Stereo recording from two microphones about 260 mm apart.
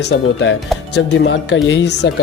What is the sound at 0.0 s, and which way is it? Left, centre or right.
Speech, left.